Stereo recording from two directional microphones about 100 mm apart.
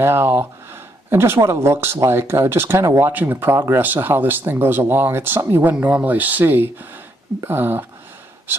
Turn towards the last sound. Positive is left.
turn(degrees=-20)  # may be behind; listen again after turning